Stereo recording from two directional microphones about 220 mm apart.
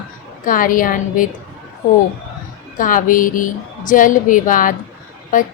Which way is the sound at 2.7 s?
35° left (ahead or behind).